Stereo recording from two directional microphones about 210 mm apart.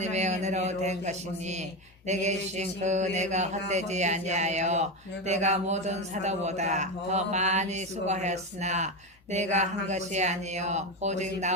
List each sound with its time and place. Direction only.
0.0 s speech: 35° right (ahead or behind)